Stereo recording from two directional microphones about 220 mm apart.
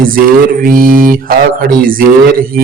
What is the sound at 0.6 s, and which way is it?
A man's voice, 40° right (ahead or behind).